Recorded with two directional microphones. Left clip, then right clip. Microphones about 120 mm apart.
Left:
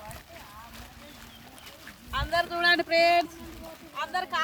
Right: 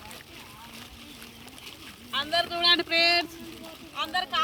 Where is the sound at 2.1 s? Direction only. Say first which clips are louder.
Right 1 dB; 15° left (ahead or behind).